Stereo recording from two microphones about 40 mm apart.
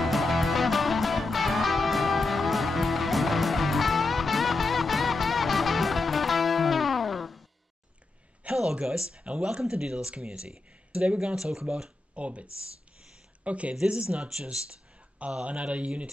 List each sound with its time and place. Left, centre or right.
0.0 s music: centre
8.4 s a sound: right
8.8 s speech: right
12.2 s speech: right